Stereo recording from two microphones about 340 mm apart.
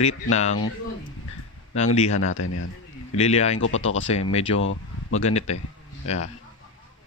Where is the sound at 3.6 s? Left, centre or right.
Left.